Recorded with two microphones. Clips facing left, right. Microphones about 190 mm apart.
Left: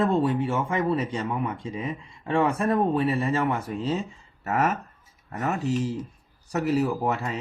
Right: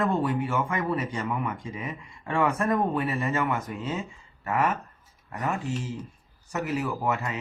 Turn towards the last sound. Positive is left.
turn(degrees=35)  # may be behind; listen again after turning